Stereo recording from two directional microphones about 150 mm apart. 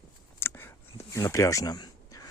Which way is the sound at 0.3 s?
15° left (ahead or behind).